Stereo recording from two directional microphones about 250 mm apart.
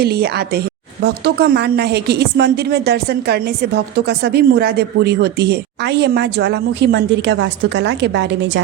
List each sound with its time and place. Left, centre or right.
0.0 s a woman's voice: right